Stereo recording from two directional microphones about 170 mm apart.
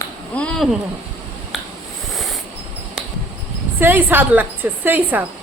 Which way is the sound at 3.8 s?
10° right (ahead or behind).